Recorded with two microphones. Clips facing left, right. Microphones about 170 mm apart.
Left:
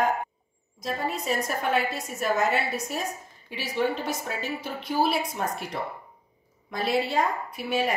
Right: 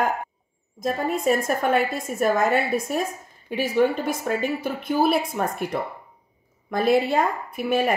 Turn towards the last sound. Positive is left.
turn(degrees=-50)  # may be behind; listen again after turning